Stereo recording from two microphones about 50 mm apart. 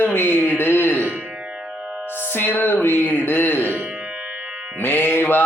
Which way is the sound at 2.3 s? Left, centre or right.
Left.